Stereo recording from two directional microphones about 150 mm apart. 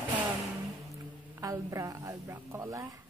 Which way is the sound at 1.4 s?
20° right (ahead or behind).